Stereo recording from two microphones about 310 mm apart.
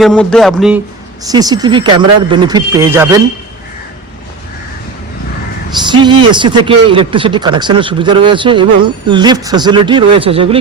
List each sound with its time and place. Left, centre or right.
0.0 s speech: centre
1.3 s speech: centre
5.8 s speech: centre